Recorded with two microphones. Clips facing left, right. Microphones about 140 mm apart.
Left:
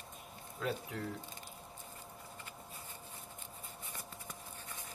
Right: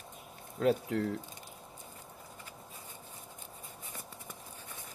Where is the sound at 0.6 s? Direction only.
50° right (ahead or behind).